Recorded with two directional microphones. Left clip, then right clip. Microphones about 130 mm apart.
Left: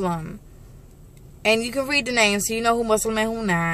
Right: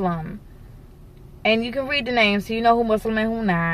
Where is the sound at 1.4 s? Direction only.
40° left (ahead or behind).